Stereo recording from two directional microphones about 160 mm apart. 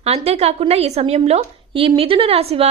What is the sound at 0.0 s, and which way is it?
A woman's voice, 40° right (ahead or behind).